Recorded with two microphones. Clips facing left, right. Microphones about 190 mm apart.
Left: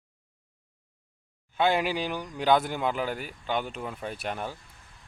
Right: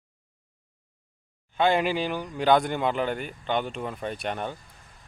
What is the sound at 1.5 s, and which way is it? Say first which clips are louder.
Speech: right 2 dB; 5° left (ahead or behind).